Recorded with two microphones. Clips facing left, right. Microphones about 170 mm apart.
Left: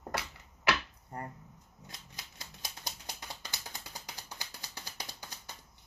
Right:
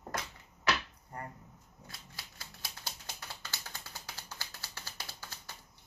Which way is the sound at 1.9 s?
20° left (ahead or behind).